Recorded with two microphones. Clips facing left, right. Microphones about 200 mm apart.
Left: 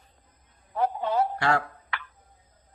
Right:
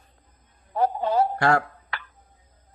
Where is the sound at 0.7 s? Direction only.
35° right (ahead or behind).